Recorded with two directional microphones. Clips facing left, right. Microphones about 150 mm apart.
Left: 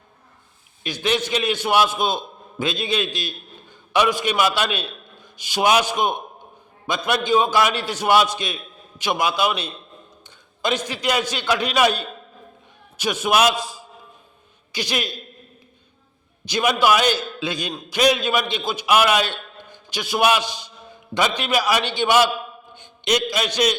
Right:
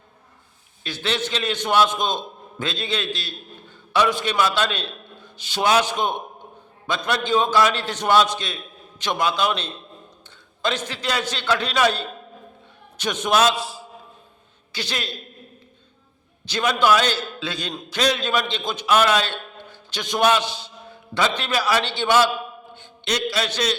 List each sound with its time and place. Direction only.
0.9 s a man's voice: 15° left (ahead or behind)
16.5 s a man's voice: 15° left (ahead or behind)